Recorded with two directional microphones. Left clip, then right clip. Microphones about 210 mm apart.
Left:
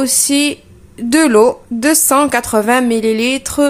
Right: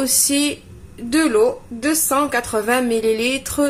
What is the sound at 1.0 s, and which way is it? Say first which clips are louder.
A woman's voice: left 6 dB; 40° left (ahead or behind).